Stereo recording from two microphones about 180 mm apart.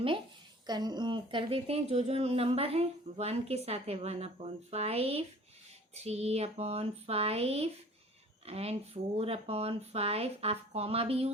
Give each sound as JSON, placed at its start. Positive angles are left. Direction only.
{"t": 0.7, "sound": "speech", "side_deg": -25}